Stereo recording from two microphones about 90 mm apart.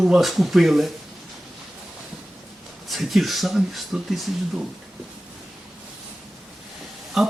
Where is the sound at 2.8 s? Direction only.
Centre (ahead or behind).